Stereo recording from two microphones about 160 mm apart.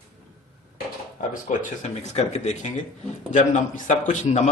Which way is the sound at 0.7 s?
55° left (ahead or behind).